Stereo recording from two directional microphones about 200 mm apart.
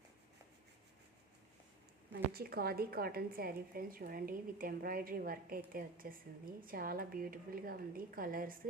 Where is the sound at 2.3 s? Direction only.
50° right (ahead or behind).